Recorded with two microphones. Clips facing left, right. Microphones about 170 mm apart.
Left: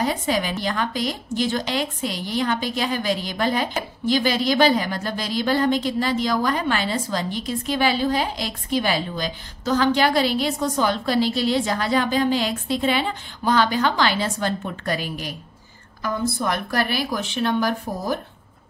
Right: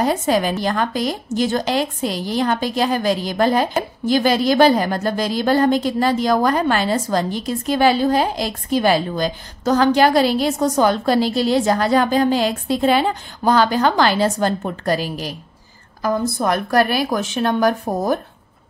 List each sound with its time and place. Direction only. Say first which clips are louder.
0.0 s a woman's voice: right 5 dB; 45° right (ahead or behind)